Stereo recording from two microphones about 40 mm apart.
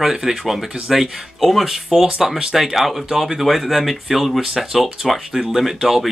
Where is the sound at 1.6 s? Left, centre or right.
Centre.